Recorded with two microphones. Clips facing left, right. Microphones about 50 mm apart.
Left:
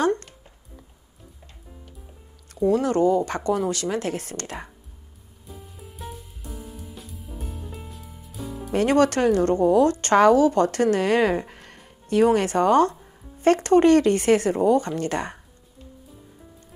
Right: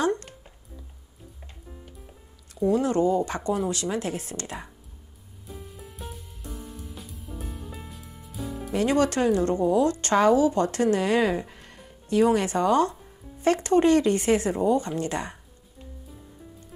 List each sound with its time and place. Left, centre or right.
2.5 s a woman's voice: left
5.5 s music: centre
8.7 s a woman's voice: left